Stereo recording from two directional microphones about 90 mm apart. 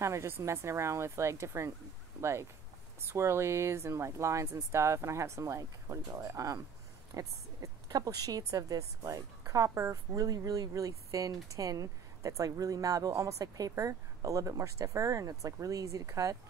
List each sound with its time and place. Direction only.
0.0 s a woman's voice: 30° right (ahead or behind)
3.0 s a woman's voice: 30° right (ahead or behind)